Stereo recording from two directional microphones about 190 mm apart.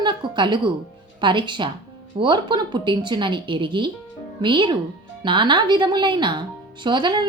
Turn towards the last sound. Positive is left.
turn(degrees=-25)  # may be behind; listen again after turning